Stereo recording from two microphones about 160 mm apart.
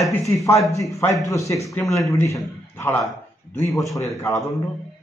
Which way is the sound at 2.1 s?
15° left (ahead or behind).